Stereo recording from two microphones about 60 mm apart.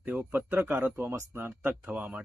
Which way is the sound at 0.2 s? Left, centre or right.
Right.